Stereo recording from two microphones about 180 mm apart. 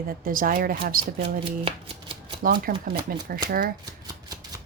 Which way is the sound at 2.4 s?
55° right (ahead or behind).